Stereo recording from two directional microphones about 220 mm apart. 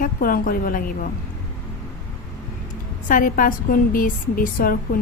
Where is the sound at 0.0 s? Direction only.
40° left (ahead or behind).